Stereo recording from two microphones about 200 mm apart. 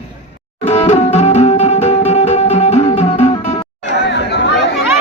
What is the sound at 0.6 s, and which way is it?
Music, 35° left (ahead or behind).